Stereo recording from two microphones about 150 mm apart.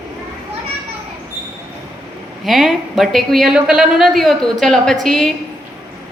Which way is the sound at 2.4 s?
Centre (ahead or behind).